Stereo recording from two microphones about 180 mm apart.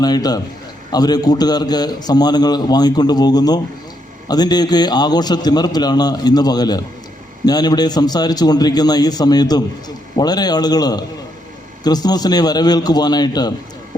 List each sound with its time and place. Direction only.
0.0 s a man's voice: 20° left (ahead or behind)